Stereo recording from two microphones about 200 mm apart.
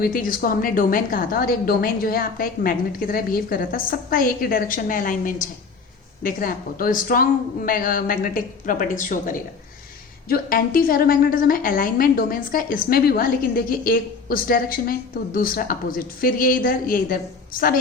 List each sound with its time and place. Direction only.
0.0 s a woman's voice: 45° left (ahead or behind)